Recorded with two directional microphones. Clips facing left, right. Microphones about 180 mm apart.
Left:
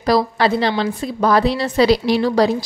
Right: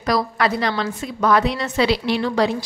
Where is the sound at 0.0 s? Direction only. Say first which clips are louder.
Left 4 dB; 30° left (ahead or behind).